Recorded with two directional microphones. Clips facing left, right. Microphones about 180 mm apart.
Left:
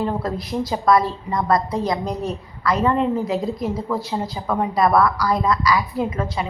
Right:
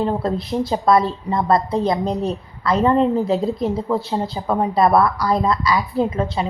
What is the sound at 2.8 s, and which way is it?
Speech, 35° right (ahead or behind).